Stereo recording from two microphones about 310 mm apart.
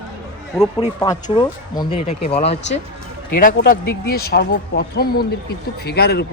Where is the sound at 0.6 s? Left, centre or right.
Centre.